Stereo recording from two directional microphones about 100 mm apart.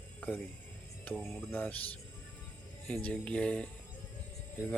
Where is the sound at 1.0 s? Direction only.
10° left (ahead or behind).